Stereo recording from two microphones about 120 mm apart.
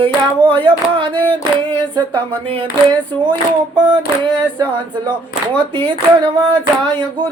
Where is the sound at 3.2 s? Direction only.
40° right (ahead or behind).